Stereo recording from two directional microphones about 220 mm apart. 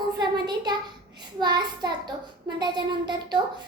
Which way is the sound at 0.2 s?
20° right (ahead or behind).